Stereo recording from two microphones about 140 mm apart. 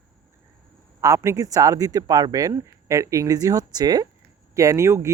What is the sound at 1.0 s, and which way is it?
Speech, 20° right (ahead or behind).